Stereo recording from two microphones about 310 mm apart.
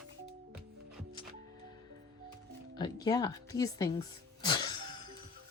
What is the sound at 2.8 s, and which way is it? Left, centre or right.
Speech, centre.